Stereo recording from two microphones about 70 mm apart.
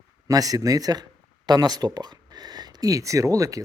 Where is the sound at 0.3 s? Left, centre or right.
Right.